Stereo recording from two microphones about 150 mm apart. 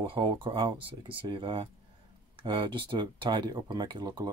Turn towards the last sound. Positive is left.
turn(degrees=-30)  # may be behind; listen again after turning